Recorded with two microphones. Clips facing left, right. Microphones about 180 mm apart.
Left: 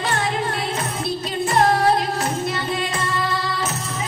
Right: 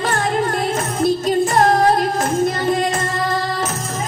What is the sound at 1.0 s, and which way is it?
Female singing, 45° right (ahead or behind).